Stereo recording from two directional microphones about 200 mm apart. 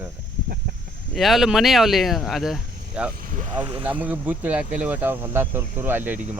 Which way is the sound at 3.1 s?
45° right (ahead or behind).